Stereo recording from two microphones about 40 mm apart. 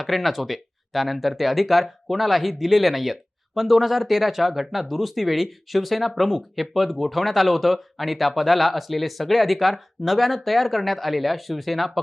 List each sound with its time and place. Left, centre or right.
0.0 s speech: centre